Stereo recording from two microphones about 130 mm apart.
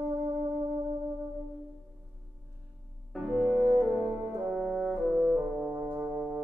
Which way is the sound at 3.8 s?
15° right (ahead or behind).